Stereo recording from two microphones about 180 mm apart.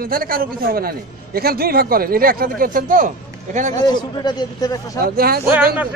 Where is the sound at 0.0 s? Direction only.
55° right (ahead or behind).